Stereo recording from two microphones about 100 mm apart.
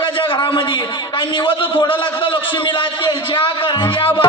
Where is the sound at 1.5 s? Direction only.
55° left (ahead or behind).